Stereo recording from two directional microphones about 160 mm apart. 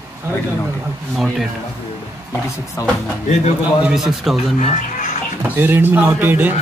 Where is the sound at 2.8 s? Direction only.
20° left (ahead or behind).